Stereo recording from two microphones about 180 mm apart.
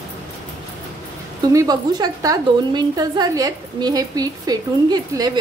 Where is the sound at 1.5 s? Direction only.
20° right (ahead or behind).